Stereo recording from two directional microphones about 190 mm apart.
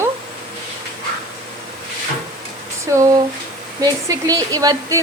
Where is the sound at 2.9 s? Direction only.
15° right (ahead or behind).